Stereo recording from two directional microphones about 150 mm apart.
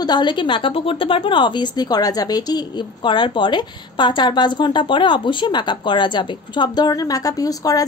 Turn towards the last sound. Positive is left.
turn(degrees=25)  # may be behind; listen again after turning